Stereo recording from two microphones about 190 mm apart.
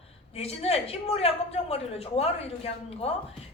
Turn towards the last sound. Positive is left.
turn(degrees=30)  # may be behind; listen again after turning